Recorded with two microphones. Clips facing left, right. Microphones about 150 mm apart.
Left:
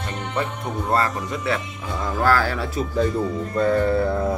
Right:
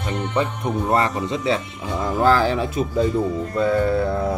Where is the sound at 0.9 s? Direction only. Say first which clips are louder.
Right 1 dB; 20° right (ahead or behind).